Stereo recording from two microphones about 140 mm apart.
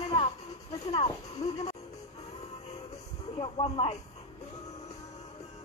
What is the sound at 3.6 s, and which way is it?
Speech, 45° left (ahead or behind).